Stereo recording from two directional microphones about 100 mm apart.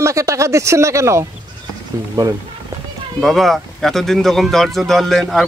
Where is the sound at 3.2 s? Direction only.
Centre (ahead or behind).